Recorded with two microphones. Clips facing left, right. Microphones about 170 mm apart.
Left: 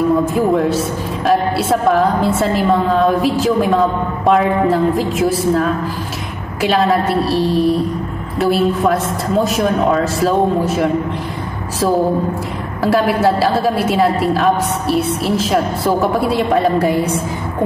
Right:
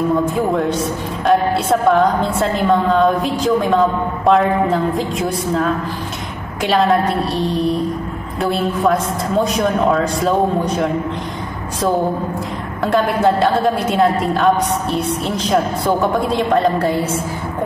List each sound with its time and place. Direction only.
0.3 s a woman's voice: centre (ahead or behind)
12.8 s a woman's voice: 5° left (ahead or behind)